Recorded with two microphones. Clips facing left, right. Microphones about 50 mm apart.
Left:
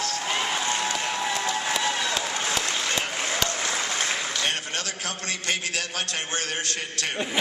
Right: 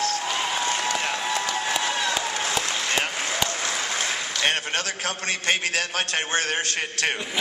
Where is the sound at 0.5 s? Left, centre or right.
Right.